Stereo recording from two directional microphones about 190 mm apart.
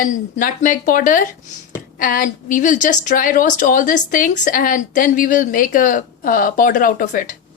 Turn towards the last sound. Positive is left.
turn(degrees=45)  # may be behind; listen again after turning